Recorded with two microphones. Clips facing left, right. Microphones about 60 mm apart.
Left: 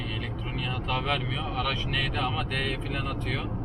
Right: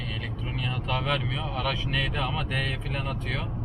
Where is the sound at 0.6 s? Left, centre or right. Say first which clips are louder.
Right 1 dB; centre.